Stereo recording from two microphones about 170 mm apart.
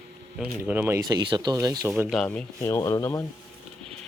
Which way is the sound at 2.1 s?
5° left (ahead or behind).